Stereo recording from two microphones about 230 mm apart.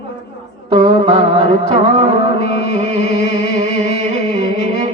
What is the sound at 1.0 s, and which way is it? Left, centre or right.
Music, right.